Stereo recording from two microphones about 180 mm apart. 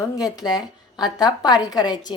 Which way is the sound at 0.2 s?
20° left (ahead or behind).